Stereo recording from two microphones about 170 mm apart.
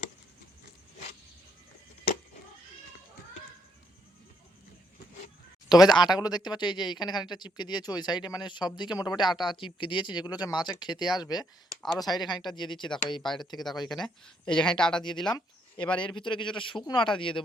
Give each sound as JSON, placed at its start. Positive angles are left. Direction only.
{"t": 5.6, "sound": "speech", "side_deg": 25}
{"t": 13.6, "sound": "speech", "side_deg": 0}
{"t": 16.0, "sound": "speech", "side_deg": 30}